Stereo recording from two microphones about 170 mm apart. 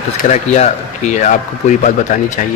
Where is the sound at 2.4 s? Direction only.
50° left (ahead or behind).